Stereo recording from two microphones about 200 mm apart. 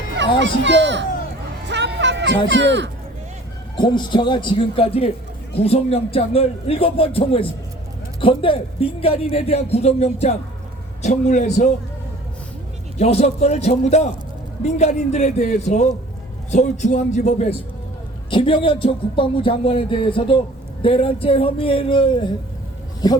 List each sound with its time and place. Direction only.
0.2 s a child's voice: 65° right (ahead or behind)
1.6 s a sound: 60° right (ahead or behind)
2.5 s a child's voice: 60° right (ahead or behind)
3.8 s a man's voice: 20° left (ahead or behind)
13.0 s a man's voice: 30° left (ahead or behind)